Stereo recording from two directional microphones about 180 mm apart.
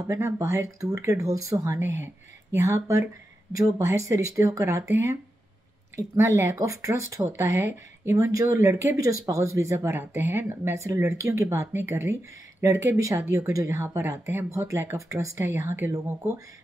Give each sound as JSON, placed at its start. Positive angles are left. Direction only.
{"t": 0.0, "sound": "speech", "side_deg": -15}
{"t": 5.9, "sound": "speech", "side_deg": -15}